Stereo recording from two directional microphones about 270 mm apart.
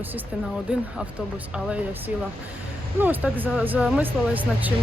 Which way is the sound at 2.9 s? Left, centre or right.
Centre.